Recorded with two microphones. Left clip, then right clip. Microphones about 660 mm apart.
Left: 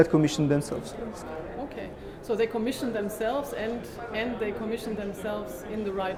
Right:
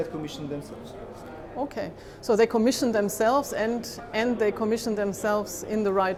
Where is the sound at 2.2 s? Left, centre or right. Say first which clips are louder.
Right 6 dB; right.